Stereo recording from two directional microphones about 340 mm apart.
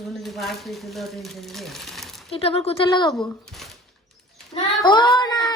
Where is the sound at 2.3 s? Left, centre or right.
Centre.